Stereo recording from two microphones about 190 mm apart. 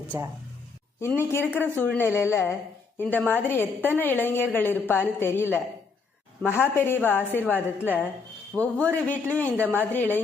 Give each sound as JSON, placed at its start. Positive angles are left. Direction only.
{"t": 0.1, "sound": "a woman's voice", "side_deg": -15}
{"t": 0.9, "sound": "speech", "side_deg": 15}
{"t": 9.6, "sound": "a woman's voice", "side_deg": -10}
{"t": 9.9, "sound": "speech", "side_deg": 10}